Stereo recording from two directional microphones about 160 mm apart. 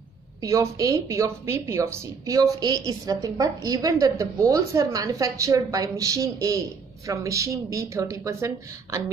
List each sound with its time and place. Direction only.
0.4 s a woman's voice: 20° right (ahead or behind)